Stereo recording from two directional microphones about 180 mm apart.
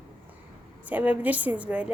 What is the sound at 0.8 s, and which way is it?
A woman's voice, 10° right (ahead or behind).